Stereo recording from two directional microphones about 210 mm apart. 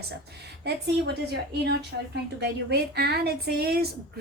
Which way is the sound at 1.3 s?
50° right (ahead or behind).